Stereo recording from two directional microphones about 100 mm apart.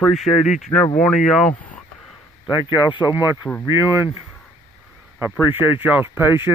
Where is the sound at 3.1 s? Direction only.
20° right (ahead or behind).